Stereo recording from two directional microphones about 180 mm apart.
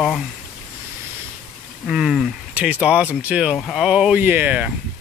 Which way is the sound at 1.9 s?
Centre (ahead or behind).